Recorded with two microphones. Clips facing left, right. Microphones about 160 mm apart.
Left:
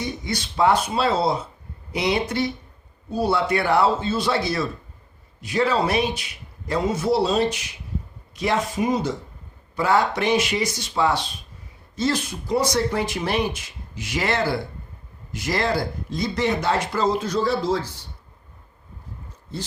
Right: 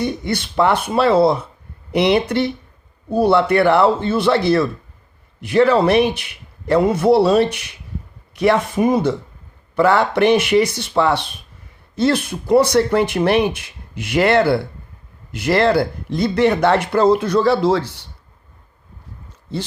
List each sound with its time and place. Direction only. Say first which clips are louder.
0.0 s speech: right 7 dB; 60° right (ahead or behind)